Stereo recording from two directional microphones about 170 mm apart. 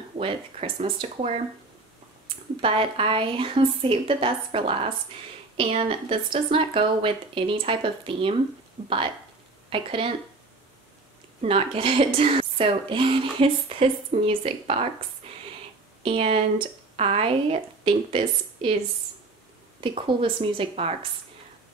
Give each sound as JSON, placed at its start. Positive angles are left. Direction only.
{"t": 0.2, "sound": "speech", "side_deg": -35}
{"t": 11.4, "sound": "speech", "side_deg": -35}
{"t": 15.2, "sound": "a sound", "side_deg": -35}
{"t": 16.0, "sound": "speech", "side_deg": -35}
{"t": 19.8, "sound": "speech", "side_deg": -30}